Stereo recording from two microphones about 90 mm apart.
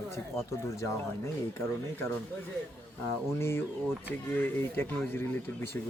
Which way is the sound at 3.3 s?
30° left (ahead or behind).